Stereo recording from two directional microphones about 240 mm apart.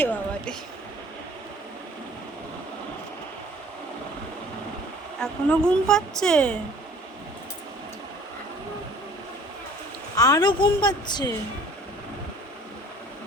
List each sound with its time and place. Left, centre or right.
0.0 s a sound: centre
5.2 s a woman's voice: centre
10.2 s a woman's voice: centre